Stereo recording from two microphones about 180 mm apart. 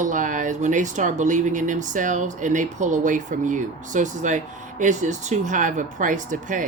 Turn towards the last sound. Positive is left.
turn(degrees=-45)  # may be behind; listen again after turning